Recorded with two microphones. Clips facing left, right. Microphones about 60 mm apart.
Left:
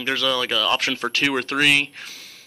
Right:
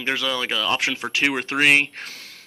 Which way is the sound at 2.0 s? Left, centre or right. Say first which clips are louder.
Right 2 dB; right.